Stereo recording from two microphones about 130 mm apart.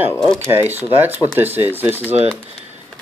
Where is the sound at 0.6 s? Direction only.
15° right (ahead or behind).